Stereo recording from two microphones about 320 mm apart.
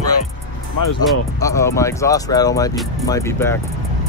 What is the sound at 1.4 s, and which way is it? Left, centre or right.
Speech, centre.